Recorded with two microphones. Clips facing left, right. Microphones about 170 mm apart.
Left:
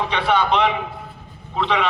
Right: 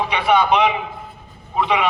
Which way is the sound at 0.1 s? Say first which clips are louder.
Right 4 dB; 10° right (ahead or behind).